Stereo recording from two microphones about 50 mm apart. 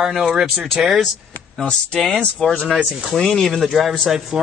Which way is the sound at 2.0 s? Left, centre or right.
Centre.